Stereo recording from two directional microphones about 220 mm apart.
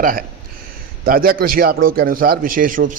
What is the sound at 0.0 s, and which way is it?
A man's voice, 40° right (ahead or behind).